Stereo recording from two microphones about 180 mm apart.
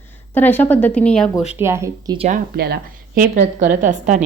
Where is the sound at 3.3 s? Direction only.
40° right (ahead or behind).